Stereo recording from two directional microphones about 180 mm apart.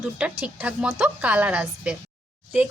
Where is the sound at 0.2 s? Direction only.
5° right (ahead or behind).